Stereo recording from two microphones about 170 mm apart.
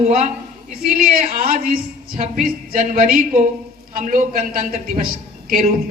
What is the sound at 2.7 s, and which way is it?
Speech, 60° right (ahead or behind).